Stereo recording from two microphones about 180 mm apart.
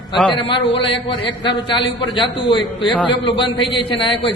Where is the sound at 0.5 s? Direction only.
30° left (ahead or behind).